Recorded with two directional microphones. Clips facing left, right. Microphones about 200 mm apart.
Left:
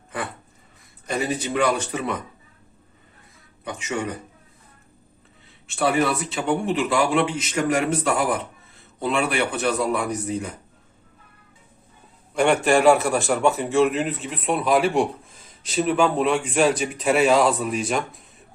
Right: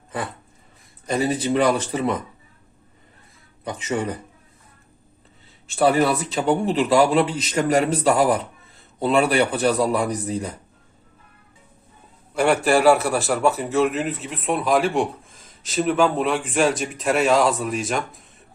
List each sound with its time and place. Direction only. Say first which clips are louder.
1.2 s a man's voice: right 3 dB; 35° right (ahead or behind)
3.6 s a man's voice: right 3 dB; 35° right (ahead or behind)
5.6 s a man's voice: right 3 dB; 35° right (ahead or behind)
12.3 s a man's voice: even; 5° right (ahead or behind)